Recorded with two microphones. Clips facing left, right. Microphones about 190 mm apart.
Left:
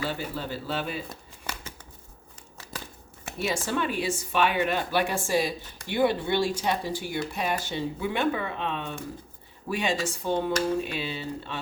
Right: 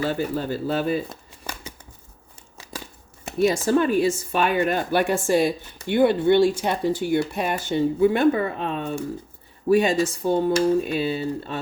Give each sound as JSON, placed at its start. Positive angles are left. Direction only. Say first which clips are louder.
{"t": 0.0, "sound": "speech", "louder": "right 7 dB", "side_deg": -45}
{"t": 3.4, "sound": "speech", "louder": "right 9 dB", "side_deg": -40}